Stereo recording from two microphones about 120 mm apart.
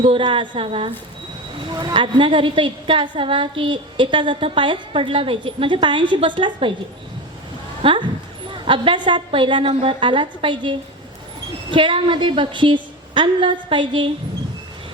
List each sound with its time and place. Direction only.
0.0 s a woman's voice: 45° right (ahead or behind)
7.8 s a woman's voice: 45° right (ahead or behind)